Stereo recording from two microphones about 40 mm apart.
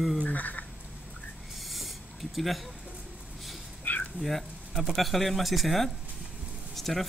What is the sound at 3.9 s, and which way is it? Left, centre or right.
Dog, left.